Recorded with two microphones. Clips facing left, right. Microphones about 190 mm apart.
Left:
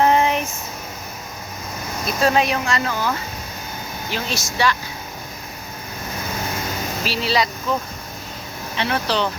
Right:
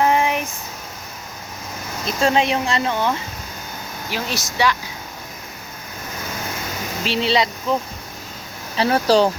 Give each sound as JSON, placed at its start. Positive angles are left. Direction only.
{"t": 0.0, "sound": "a sound", "side_deg": -15}
{"t": 2.0, "sound": "speech", "side_deg": -25}
{"t": 4.1, "sound": "speech", "side_deg": -10}
{"t": 7.0, "sound": "speech", "side_deg": -25}
{"t": 8.7, "sound": "speech", "side_deg": -40}